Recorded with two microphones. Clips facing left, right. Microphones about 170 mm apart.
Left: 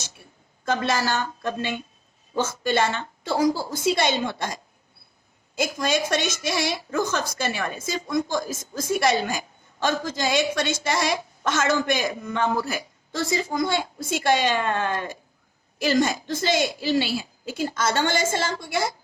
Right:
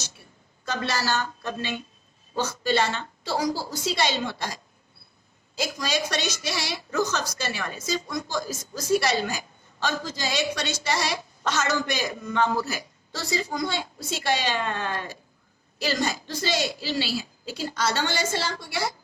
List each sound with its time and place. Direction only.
0.6 s a woman's voice: 50° left (ahead or behind)